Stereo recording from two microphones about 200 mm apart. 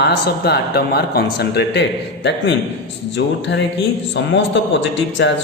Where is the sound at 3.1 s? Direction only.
65° left (ahead or behind).